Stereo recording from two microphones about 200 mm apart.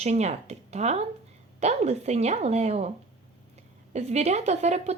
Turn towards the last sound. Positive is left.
turn(degrees=-35)  # may be behind; listen again after turning